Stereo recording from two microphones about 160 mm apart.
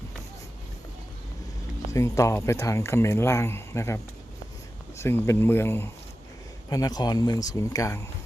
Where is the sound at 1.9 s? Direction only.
20° left (ahead or behind).